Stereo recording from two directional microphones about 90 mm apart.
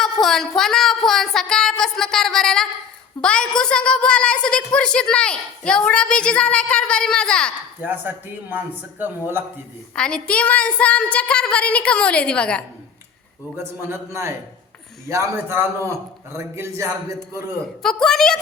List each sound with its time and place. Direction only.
0.0 s a woman's voice: 5° left (ahead or behind)
7.8 s speech: 20° right (ahead or behind)
9.9 s a woman's voice: 10° left (ahead or behind)
13.6 s a man's voice: 25° right (ahead or behind)
17.8 s a woman's voice: 5° left (ahead or behind)